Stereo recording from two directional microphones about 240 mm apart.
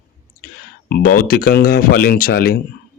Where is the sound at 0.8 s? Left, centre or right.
Left.